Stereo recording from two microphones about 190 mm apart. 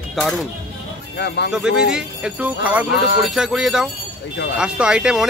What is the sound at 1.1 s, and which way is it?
Speech, 65° left (ahead or behind).